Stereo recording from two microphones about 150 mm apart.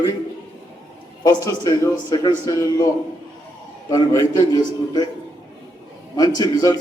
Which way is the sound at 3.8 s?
20° left (ahead or behind).